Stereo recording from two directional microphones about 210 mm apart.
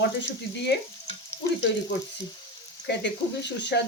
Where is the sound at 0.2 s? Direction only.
55° left (ahead or behind).